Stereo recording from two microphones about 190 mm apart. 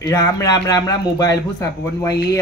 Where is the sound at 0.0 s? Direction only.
20° left (ahead or behind).